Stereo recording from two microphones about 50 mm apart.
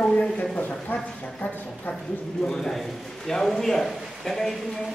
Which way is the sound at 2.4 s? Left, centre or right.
Centre.